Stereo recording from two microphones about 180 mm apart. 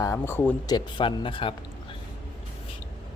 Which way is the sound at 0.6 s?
25° left (ahead or behind).